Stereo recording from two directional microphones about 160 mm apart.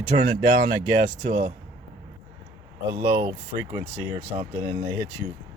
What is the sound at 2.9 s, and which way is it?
Speech, 20° right (ahead or behind).